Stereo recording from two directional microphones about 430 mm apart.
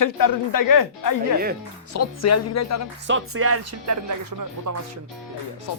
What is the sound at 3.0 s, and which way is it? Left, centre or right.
Speech, right.